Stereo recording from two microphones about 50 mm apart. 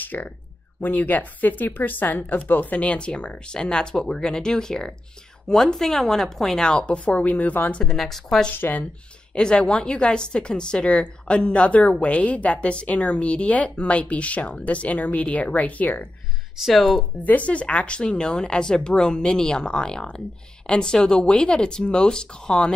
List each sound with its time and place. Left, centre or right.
0.0 s speech: left
7.8 s speech: centre
8.5 s speech: left
9.3 s speech: centre
16.6 s speech: centre
17.2 s speech: left